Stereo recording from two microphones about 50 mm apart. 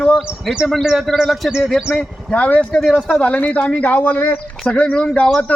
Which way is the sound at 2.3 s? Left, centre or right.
Left.